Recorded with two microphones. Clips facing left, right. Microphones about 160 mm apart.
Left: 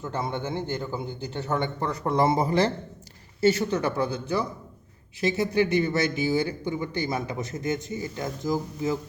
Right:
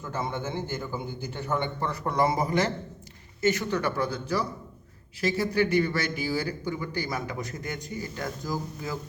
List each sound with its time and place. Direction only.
0.0 s speech: 20° left (ahead or behind)
2.0 s speech: 25° left (ahead or behind)